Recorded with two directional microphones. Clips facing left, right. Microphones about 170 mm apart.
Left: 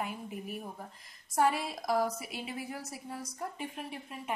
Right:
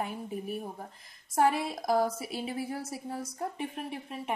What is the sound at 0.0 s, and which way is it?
A woman's voice, 30° right (ahead or behind).